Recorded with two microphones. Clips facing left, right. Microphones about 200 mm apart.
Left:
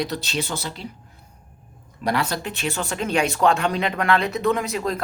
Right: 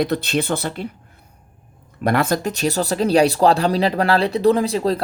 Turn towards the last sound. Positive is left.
turn(degrees=-30)  # may be behind; listen again after turning